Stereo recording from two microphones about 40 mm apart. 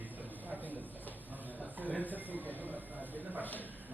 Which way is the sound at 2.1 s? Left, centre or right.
Right.